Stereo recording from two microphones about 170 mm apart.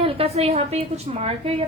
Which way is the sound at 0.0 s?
35° right (ahead or behind).